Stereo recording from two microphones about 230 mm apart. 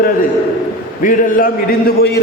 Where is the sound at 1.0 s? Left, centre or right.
Left.